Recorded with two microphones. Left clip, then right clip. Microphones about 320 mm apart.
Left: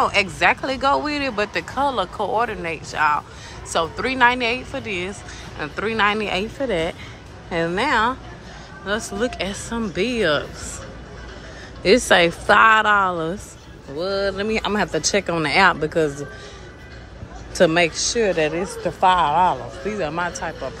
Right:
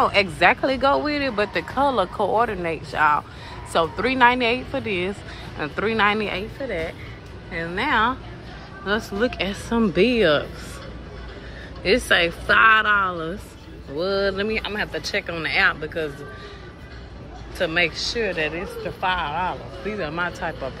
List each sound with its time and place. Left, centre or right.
0.0 s speech: centre
11.8 s a man's voice: centre
14.5 s speech: centre
17.6 s a man's voice: centre